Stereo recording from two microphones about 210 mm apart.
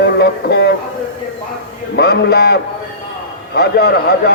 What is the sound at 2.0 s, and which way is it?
Speech, 50° left (ahead or behind).